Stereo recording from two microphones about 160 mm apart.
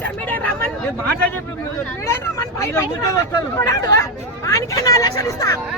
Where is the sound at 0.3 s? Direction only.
10° left (ahead or behind).